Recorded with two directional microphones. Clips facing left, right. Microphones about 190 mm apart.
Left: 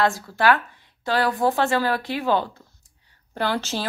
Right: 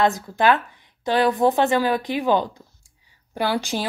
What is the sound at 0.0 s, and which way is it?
A woman's voice, 20° right (ahead or behind).